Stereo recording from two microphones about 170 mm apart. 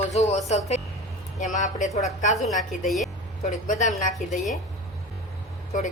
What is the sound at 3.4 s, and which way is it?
Speech, 45° left (ahead or behind).